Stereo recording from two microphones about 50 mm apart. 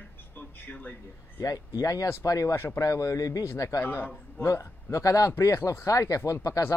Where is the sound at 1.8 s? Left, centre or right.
Left.